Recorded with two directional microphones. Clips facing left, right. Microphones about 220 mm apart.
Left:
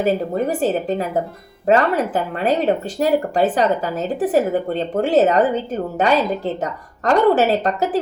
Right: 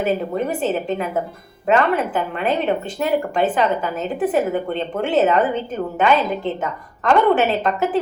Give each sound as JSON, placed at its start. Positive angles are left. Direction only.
{"t": 0.0, "sound": "a woman's voice", "side_deg": 40}